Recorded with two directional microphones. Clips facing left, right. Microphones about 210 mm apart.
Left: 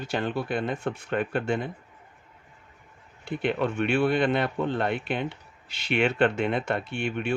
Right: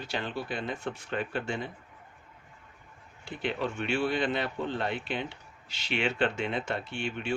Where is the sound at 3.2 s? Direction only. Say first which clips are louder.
Left 6 dB; 60° left (ahead or behind).